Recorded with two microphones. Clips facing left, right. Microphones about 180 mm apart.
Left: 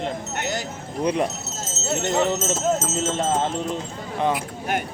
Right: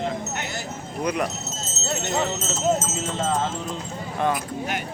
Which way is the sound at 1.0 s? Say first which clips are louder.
Left 3 dB; 30° left (ahead or behind).